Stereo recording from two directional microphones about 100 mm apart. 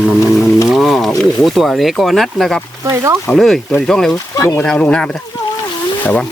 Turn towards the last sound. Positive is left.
turn(degrees=15)  # may be behind; listen again after turning